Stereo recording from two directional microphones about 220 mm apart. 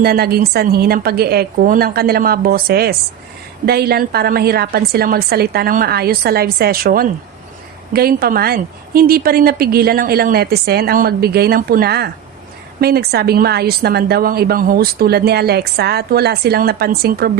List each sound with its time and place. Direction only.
0.0 s a woman's voice: 45° right (ahead or behind)